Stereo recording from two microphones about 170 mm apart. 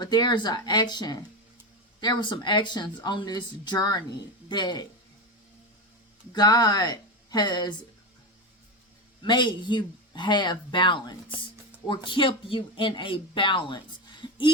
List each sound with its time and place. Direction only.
0.0 s speech: 25° left (ahead or behind)
6.3 s speech: 25° left (ahead or behind)
9.2 s speech: 25° left (ahead or behind)